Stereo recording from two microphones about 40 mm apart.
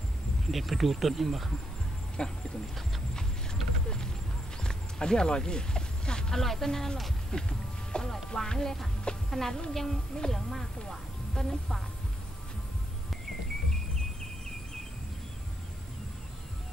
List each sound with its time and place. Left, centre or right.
0.5 s speech: centre
2.2 s speech: left
4.6 s music: centre
6.4 s a woman's voice: centre
7.2 s music: centre
9.3 s a woman's voice: centre